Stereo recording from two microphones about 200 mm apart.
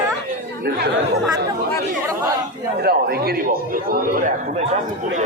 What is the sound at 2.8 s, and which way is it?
A man's voice, 50° right (ahead or behind).